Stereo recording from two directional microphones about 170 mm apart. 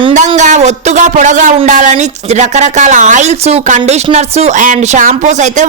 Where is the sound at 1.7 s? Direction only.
45° right (ahead or behind).